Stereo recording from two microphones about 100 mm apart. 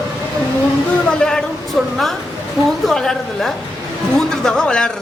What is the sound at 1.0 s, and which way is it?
A woman's voice, 10° left (ahead or behind).